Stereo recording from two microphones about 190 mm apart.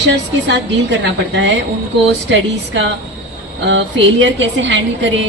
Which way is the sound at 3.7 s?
75° right (ahead or behind).